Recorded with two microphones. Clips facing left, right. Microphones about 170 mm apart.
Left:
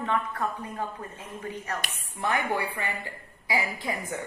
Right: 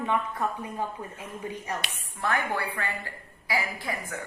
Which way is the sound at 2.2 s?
15° left (ahead or behind).